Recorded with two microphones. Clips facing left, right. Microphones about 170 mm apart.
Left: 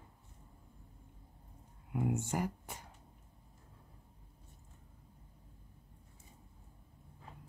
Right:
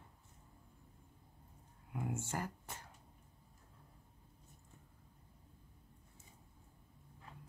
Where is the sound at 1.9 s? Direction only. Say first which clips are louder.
Left 6 dB; 20° left (ahead or behind).